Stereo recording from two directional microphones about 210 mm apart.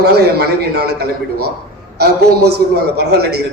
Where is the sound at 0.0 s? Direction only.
50° right (ahead or behind).